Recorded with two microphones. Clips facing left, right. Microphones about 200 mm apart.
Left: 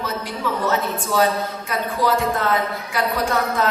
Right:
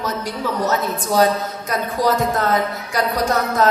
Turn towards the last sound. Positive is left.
turn(degrees=-40)  # may be behind; listen again after turning